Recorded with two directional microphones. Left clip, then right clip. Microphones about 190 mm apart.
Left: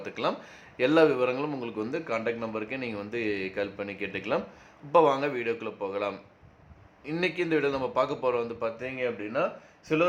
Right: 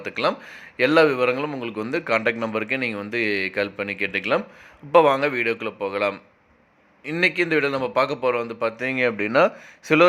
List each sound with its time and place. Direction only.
0.0 s a man's voice: 20° right (ahead or behind)
1.8 s speech: 30° right (ahead or behind); by 9.5 s 50° right (ahead or behind)